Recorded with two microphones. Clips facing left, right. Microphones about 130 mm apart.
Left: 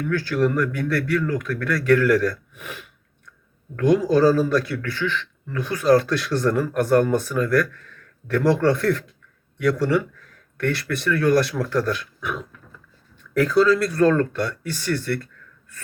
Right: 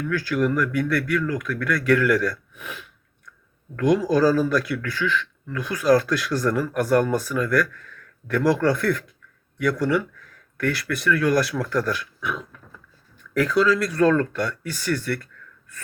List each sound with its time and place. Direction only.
0.1 s speech: 30° left (ahead or behind)
4.1 s speech: 30° left (ahead or behind)
12.2 s a sound: 45° left (ahead or behind)
13.4 s speech: 30° left (ahead or behind)